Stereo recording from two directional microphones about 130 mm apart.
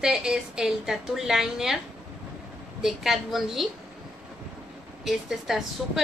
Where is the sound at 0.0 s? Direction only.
5° right (ahead or behind).